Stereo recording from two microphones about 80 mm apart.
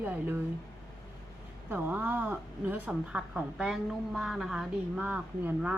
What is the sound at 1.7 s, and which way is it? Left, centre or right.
A woman's voice, right.